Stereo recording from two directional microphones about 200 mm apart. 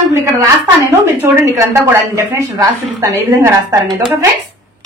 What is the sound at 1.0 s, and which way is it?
A woman's voice, 10° right (ahead or behind).